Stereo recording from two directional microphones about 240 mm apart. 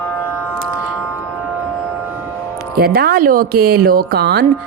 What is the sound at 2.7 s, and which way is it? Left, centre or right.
Speech, right.